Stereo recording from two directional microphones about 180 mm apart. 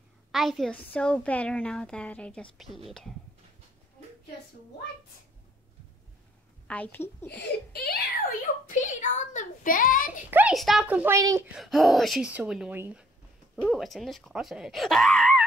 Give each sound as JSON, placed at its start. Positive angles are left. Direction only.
{"t": 0.3, "sound": "a woman's voice", "side_deg": 0}
{"t": 6.7, "sound": "a woman's voice", "side_deg": 10}
{"t": 7.2, "sound": "speech", "side_deg": 65}
{"t": 8.6, "sound": "a child's voice", "side_deg": 45}
{"t": 10.3, "sound": "a child's voice", "side_deg": -5}
{"t": 11.5, "sound": "speech", "side_deg": 0}